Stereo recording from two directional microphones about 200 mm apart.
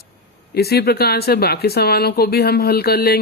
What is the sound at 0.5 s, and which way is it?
Speech, 50° left (ahead or behind).